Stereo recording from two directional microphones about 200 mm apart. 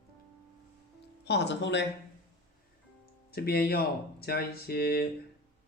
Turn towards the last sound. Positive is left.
turn(degrees=50)  # may be behind; listen again after turning